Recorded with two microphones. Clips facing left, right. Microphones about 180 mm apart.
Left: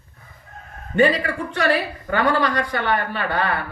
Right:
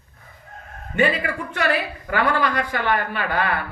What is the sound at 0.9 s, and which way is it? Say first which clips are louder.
A man's voice: left 3 dB; 35° left (ahead or behind).